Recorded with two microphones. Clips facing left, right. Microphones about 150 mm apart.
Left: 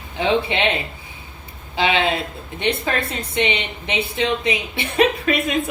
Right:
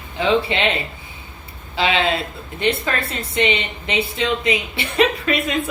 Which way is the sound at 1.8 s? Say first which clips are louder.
Even; 20° left (ahead or behind).